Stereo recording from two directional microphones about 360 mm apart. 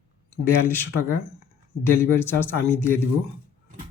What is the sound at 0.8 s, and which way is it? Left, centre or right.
Speech, centre.